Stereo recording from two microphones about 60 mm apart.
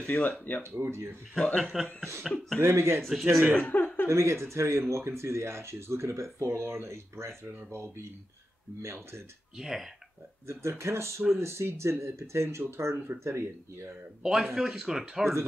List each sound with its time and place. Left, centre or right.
0.0 s speech: left
0.8 s speech: right
1.6 s speech: centre
2.6 s speech: right
3.0 s speech: centre
3.5 s speech: left
4.1 s speech: right
9.6 s speech: centre
10.4 s speech: right
12.9 s speech: right
13.2 s speech: right
14.2 s speech: centre